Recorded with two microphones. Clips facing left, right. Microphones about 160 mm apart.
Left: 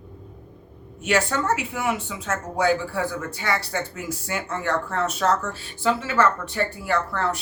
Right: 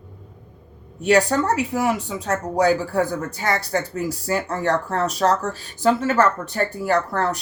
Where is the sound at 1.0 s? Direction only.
35° right (ahead or behind).